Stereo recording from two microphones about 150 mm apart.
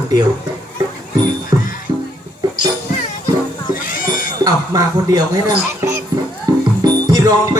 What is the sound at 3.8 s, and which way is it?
Cat, 65° left (ahead or behind).